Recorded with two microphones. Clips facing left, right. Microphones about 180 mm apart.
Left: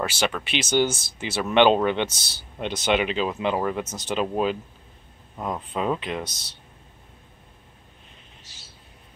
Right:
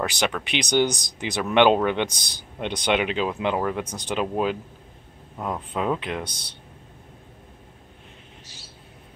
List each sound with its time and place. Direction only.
0.0 s speech: 15° right (ahead or behind)
5.4 s speech: 10° left (ahead or behind)
5.8 s speech: 10° right (ahead or behind)